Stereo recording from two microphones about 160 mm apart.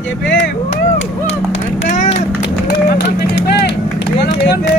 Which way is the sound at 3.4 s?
90° left.